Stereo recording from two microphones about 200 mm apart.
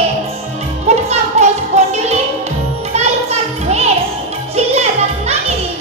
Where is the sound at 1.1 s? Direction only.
35° right (ahead or behind).